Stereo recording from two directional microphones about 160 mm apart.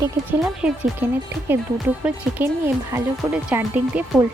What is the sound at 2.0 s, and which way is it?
Speech, 10° right (ahead or behind).